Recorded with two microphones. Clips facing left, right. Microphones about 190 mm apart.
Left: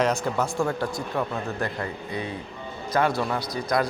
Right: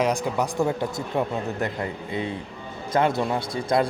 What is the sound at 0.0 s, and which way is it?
A man's voice, 15° right (ahead or behind).